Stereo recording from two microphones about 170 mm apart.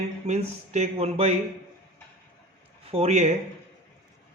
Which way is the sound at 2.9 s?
40° right (ahead or behind).